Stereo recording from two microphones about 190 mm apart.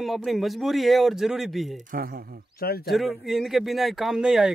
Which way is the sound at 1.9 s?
50° right (ahead or behind).